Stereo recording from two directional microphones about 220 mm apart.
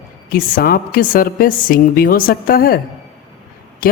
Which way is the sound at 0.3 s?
40° left (ahead or behind).